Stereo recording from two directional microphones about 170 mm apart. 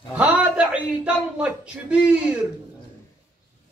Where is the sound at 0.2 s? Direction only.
5° right (ahead or behind).